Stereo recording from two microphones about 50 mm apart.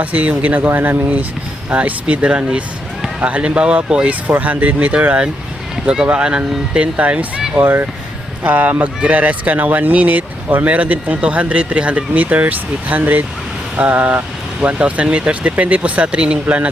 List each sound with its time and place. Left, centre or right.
0.0 s speech: right
4.0 s speech: right
7.5 s speech: right